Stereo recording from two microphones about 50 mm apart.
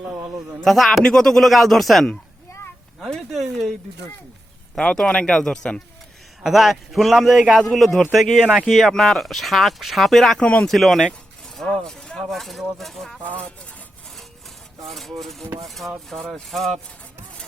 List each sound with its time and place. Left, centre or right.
0.6 s speech: centre
3.1 s speech: centre
5.1 s speech: centre
6.4 s speech: centre
10.4 s speech: left
10.7 s speech: centre
11.6 s speech: centre
13.2 s speech: left
14.8 s speech: centre
16.1 s speech: centre